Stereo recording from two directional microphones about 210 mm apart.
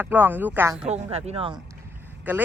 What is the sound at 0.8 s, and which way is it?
Speech, 30° right (ahead or behind).